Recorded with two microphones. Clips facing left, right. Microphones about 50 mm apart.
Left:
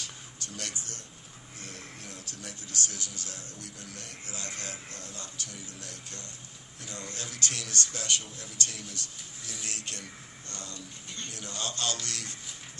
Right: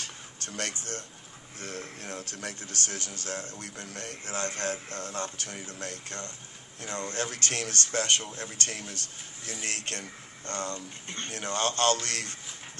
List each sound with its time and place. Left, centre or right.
0.0 s music: right
1.5 s speech: right